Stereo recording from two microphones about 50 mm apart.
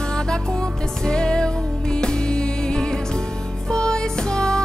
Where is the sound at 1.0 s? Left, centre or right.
Centre.